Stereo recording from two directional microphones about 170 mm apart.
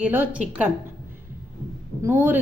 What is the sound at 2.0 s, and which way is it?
Speech, 15° right (ahead or behind).